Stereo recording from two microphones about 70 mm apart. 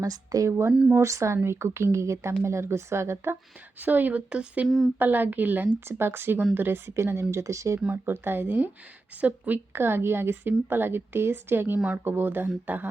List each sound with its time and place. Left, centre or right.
0.0 s speech: right
0.7 s a woman's voice: centre
0.9 s a woman's voice: right
3.8 s a woman's voice: right
4.9 s a woman's voice: right
7.8 s a woman's voice: right
9.7 s a woman's voice: right